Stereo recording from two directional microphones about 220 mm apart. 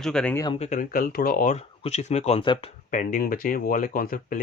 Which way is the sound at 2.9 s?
35° left (ahead or behind).